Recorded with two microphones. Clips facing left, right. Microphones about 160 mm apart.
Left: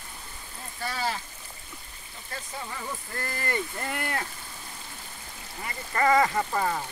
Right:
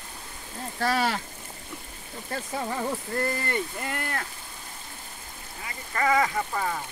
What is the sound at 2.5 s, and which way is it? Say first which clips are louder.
Speech: right 8 dB; 50° right (ahead or behind).